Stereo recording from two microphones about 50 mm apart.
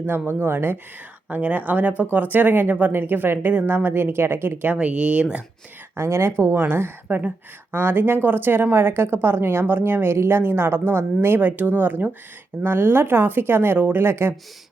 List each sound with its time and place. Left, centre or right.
0.3 s speech: right
1.3 s speech: right
4.7 s speech: right
6.0 s speech: right